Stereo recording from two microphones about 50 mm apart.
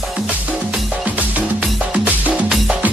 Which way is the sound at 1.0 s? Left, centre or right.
Right.